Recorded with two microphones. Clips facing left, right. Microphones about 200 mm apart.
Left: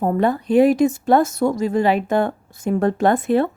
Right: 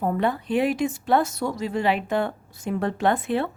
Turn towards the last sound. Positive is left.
turn(degrees=45)  # may be behind; listen again after turning